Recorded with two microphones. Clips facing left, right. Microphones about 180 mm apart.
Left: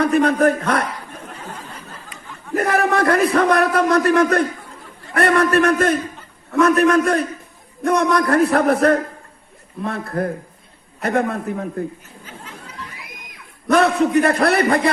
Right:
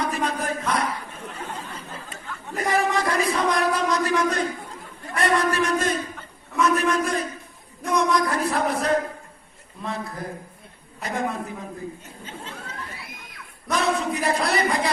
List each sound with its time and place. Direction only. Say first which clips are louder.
0.0 s a man's voice: left 11 dB; 60° left (ahead or behind)
2.6 s a man's voice: left 5 dB; 60° left (ahead or behind)
13.7 s a man's voice: left 8 dB; 60° left (ahead or behind)